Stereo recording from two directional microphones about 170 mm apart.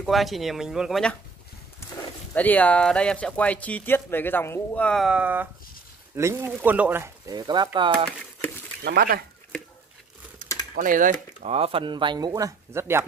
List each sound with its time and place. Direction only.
0.0 s speech: centre (ahead or behind)
2.0 s speech: 10° left (ahead or behind); by 8.1 s 25° right (ahead or behind)
8.8 s speech: 65° right (ahead or behind)
10.7 s speech: 55° right (ahead or behind); by 13.0 s 15° right (ahead or behind)